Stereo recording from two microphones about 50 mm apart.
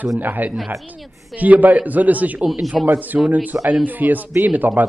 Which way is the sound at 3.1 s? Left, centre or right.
Right.